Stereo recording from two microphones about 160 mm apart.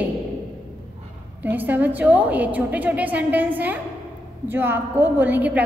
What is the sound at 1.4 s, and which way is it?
A woman's voice, 10° right (ahead or behind).